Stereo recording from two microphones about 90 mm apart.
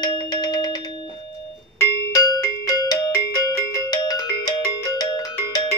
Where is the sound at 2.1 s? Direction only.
45° left (ahead or behind).